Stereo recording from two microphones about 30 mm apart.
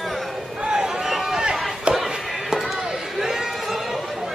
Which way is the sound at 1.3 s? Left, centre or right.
Right.